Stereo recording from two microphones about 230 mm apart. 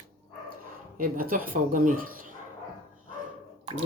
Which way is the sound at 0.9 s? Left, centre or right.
Right.